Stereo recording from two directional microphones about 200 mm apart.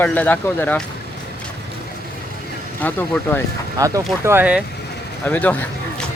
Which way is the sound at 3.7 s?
15° right (ahead or behind).